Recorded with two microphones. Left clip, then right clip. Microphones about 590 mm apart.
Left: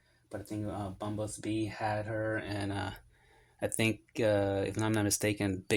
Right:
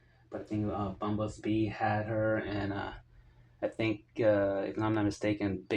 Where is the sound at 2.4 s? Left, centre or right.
Left.